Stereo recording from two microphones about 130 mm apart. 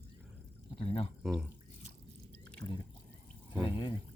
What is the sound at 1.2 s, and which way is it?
Speech, 5° right (ahead or behind).